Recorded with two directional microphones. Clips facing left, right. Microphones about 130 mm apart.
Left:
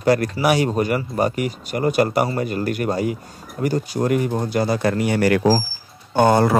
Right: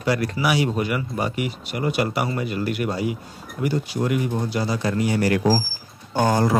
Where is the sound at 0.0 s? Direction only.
45° left (ahead or behind).